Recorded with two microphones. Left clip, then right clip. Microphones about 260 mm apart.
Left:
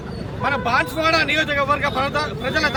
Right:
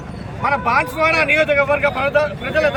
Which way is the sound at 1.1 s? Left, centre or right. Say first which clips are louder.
Right 5 dB; centre.